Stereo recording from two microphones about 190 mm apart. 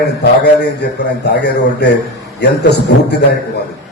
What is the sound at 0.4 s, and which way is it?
A man's voice, 60° left (ahead or behind).